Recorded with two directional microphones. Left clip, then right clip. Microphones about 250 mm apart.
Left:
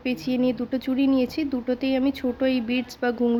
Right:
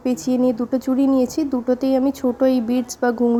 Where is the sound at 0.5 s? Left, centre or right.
Centre.